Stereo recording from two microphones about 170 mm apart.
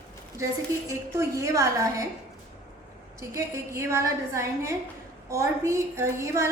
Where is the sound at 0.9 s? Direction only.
20° right (ahead or behind).